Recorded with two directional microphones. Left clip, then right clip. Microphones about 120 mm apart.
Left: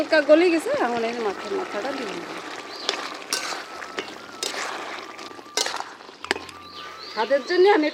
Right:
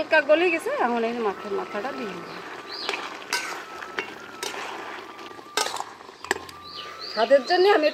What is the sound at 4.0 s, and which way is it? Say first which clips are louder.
Music: even; 35° left (ahead or behind).